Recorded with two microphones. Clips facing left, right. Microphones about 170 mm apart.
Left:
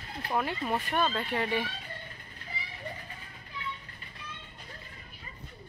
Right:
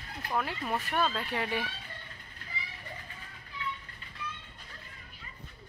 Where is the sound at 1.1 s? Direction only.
5° right (ahead or behind).